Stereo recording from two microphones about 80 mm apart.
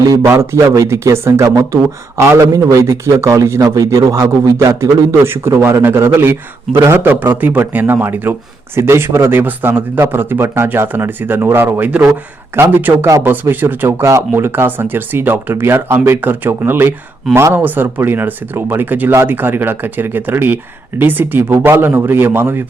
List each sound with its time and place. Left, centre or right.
0.3 s a man's voice: right
2.5 s a man's voice: right
2.8 s a man's voice: right
17.6 s speech: right